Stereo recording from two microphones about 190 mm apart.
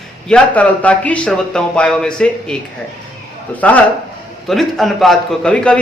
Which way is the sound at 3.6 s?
10° left (ahead or behind).